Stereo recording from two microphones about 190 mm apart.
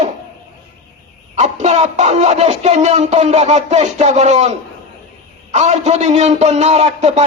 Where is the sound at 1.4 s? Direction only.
35° right (ahead or behind).